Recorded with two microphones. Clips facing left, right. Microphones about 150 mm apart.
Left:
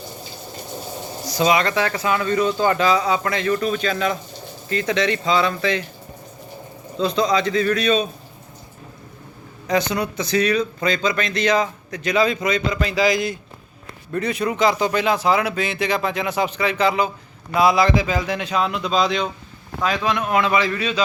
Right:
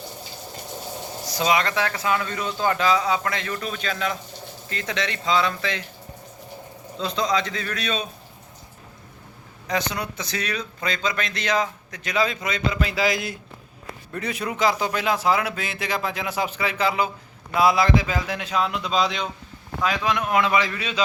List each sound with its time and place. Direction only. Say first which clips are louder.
1.2 s speech: left 4 dB; centre (ahead or behind)
7.0 s speech: left 5 dB; centre (ahead or behind)
9.6 s a man's voice: left 6 dB; centre (ahead or behind)
20.0 s speech: left 2 dB; 25° left (ahead or behind)
20.6 s a man's voice: left 4 dB; 20° right (ahead or behind)